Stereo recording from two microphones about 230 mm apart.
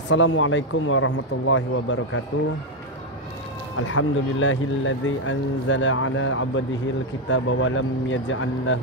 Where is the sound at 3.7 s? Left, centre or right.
Left.